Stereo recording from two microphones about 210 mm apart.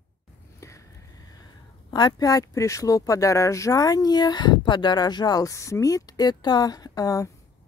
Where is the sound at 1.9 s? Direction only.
20° left (ahead or behind).